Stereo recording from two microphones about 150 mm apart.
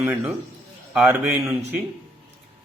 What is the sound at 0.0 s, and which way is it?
Speech, 5° right (ahead or behind).